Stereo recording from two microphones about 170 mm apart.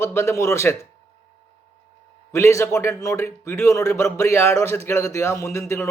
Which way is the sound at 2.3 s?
15° left (ahead or behind).